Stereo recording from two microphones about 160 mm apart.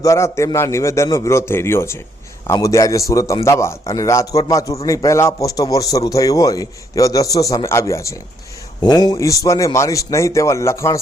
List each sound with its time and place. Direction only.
0.0 s a man's voice: 20° left (ahead or behind)